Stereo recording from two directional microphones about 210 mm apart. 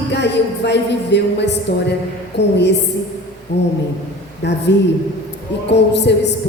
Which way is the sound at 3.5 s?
55° left (ahead or behind).